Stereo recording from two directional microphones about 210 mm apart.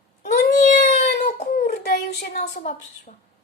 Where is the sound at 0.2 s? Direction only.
35° left (ahead or behind).